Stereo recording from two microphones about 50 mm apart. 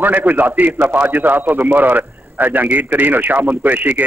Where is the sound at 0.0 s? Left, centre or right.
Right.